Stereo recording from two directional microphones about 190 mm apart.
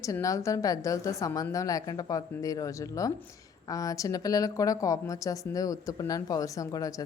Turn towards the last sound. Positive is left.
turn(degrees=20)  # may be behind; listen again after turning